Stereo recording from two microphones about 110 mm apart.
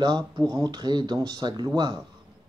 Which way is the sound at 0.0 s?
40° right (ahead or behind).